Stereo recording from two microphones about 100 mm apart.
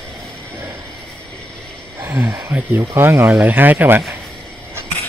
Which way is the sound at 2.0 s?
25° right (ahead or behind).